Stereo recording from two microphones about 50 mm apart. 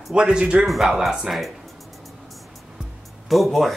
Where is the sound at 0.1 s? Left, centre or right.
Centre.